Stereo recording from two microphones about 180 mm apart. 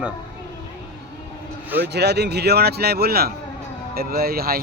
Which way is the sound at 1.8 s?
65° right (ahead or behind).